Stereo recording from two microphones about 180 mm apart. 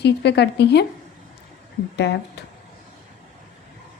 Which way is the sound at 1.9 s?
75° left (ahead or behind).